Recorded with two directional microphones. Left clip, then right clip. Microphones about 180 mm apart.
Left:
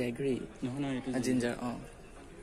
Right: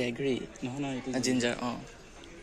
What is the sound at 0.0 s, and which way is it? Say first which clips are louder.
Speech: right 3 dB; centre (ahead or behind).